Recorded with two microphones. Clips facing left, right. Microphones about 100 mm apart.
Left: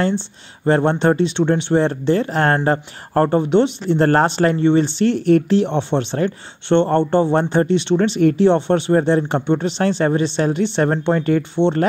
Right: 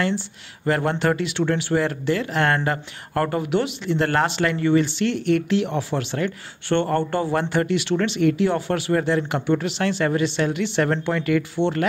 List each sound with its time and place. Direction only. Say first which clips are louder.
0.7 s speech: left 6 dB; 30° left (ahead or behind)